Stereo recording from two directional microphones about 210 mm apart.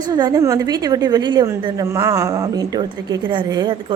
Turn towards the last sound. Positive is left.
turn(degrees=-20)  # may be behind; listen again after turning